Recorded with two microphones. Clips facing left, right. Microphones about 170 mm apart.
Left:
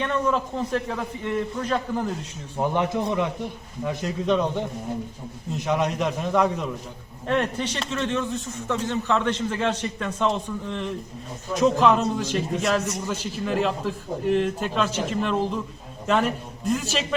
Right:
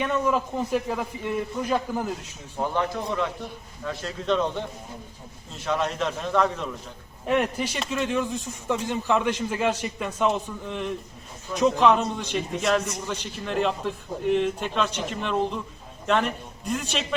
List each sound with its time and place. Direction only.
0.0 s a man's voice: 10° right (ahead or behind)
2.6 s a man's voice: 15° left (ahead or behind)
7.3 s a man's voice: 10° right (ahead or behind)